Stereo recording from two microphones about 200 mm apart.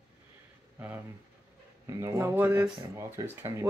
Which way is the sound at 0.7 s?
10° right (ahead or behind).